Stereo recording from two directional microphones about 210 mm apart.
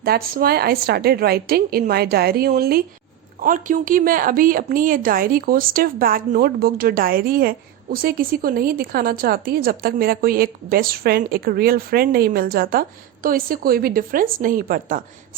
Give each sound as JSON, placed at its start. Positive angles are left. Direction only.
{"t": 0.0, "sound": "a woman's voice", "side_deg": -45}